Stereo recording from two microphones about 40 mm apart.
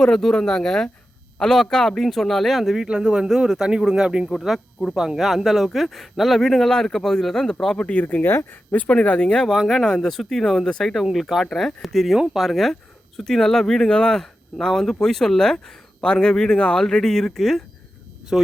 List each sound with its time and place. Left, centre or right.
0.0 s speech: centre
2.8 s speech: right
3.2 s speech: centre
5.1 s speech: centre
7.8 s speech: left
8.0 s speech: left
8.7 s speech: left
9.0 s speech: left
9.4 s speech: centre
11.1 s speech: centre
14.2 s speech: centre
16.8 s speech: centre
18.3 s speech: centre